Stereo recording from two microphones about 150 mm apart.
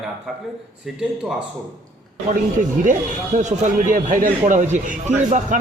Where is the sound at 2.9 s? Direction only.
55° right (ahead or behind).